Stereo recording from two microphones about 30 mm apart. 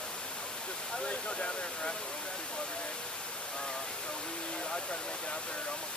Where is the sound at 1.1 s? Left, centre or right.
Left.